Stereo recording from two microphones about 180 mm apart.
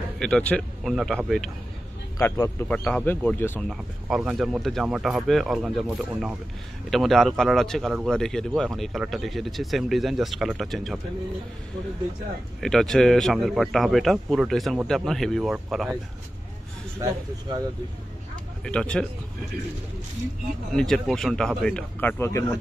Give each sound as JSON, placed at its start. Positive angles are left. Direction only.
{"t": 0.2, "sound": "a man's voice", "side_deg": 5}
{"t": 2.1, "sound": "speech", "side_deg": 15}
{"t": 3.7, "sound": "a man's voice", "side_deg": -5}
{"t": 12.5, "sound": "a man's voice", "side_deg": 0}
{"t": 18.6, "sound": "a man's voice", "side_deg": 5}
{"t": 20.7, "sound": "a man's voice", "side_deg": 5}